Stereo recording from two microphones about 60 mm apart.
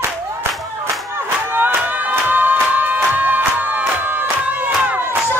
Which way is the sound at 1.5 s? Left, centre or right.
Right.